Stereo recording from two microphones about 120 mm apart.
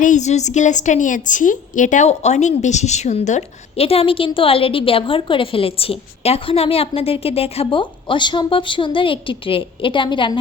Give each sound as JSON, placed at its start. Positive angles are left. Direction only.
{"t": 0.0, "sound": "a woman's voice", "side_deg": 80}